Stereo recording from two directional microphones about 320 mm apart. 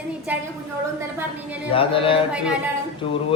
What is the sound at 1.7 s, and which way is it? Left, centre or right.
Speech, centre.